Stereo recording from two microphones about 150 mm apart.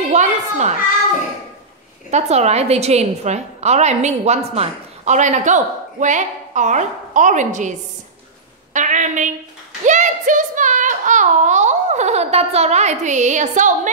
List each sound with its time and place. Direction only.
0.1 s a sound: 50° right (ahead or behind)
2.0 s a woman's voice: 50° right (ahead or behind)
8.7 s a woman's voice: 55° right (ahead or behind)